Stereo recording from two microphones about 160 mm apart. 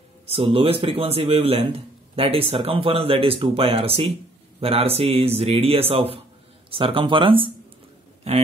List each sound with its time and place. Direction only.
0.3 s speech: 35° right (ahead or behind)